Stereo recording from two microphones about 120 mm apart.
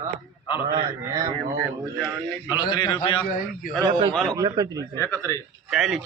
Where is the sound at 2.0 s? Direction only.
15° right (ahead or behind).